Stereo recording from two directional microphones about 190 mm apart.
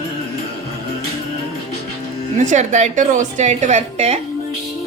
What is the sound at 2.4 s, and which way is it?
A woman's voice, 40° right (ahead or behind).